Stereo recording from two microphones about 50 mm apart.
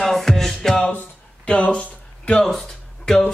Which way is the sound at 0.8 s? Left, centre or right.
Left.